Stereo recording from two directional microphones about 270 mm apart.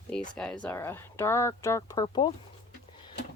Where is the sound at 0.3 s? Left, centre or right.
Centre.